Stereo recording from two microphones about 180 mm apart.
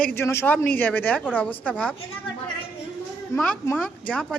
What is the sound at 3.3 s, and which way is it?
Speech, 15° left (ahead or behind).